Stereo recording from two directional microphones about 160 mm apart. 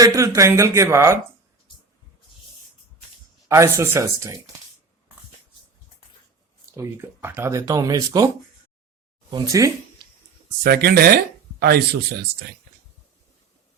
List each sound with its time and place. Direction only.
0.0 s speech: 20° right (ahead or behind)
3.5 s speech: 20° right (ahead or behind)
6.9 s speech: 15° right (ahead or behind)
9.3 s speech: 20° right (ahead or behind)
10.6 s speech: 75° right (ahead or behind)